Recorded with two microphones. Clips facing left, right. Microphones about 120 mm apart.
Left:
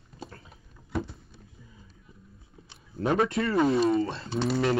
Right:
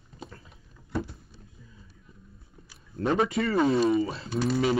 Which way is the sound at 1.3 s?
20° left (ahead or behind).